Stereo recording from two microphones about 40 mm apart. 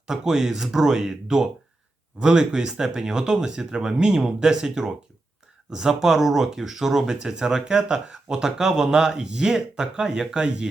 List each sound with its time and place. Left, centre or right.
0.1 s speech: centre